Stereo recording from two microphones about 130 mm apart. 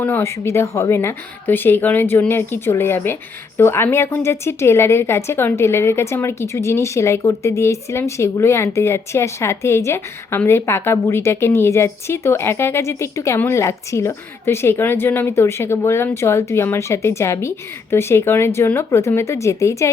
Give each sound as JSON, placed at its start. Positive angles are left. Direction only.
{"t": 0.0, "sound": "a woman's voice", "side_deg": 20}